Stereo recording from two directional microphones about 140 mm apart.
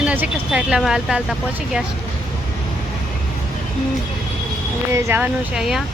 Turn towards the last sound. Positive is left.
turn(degrees=-5)  # may be behind; listen again after turning